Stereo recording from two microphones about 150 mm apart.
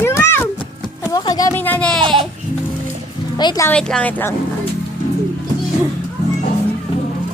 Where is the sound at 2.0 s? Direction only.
35° right (ahead or behind).